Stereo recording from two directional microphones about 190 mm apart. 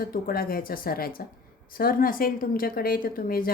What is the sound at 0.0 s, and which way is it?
A woman's voice, 50° left (ahead or behind).